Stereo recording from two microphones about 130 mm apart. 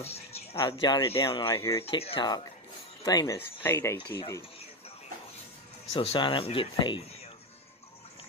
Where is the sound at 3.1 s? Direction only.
30° left (ahead or behind).